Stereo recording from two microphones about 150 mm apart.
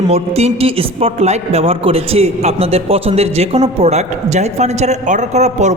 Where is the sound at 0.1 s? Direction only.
45° right (ahead or behind).